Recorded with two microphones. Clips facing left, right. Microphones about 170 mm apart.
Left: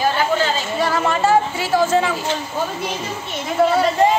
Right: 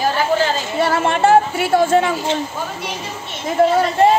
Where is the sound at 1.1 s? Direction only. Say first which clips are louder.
Right 5 dB; 60° right (ahead or behind).